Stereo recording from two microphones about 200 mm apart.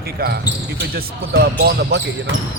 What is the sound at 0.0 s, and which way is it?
Speech, 50° right (ahead or behind).